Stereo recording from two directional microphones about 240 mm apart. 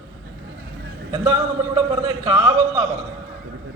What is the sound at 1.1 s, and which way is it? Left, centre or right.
A man's voice, centre.